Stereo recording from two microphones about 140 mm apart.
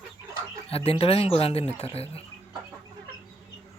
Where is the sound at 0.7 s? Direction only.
45° left (ahead or behind).